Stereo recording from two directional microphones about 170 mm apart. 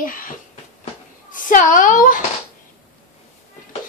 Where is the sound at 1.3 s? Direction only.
50° left (ahead or behind).